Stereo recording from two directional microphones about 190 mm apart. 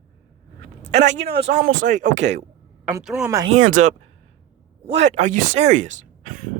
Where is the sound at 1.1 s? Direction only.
65° right (ahead or behind).